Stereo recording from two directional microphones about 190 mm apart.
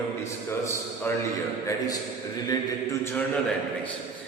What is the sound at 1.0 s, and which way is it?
Speech, 15° left (ahead or behind).